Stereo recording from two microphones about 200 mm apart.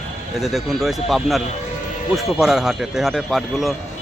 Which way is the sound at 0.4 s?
Centre (ahead or behind).